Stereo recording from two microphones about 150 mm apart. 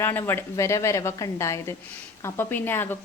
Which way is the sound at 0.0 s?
15° left (ahead or behind).